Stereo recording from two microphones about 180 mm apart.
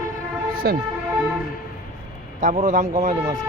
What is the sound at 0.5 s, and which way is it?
Vehicle, 55° right (ahead or behind).